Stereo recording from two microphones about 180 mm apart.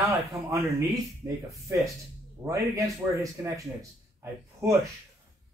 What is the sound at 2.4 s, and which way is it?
A man's voice, 15° right (ahead or behind).